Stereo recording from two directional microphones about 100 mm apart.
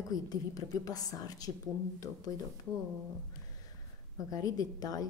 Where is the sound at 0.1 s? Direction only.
35° left (ahead or behind).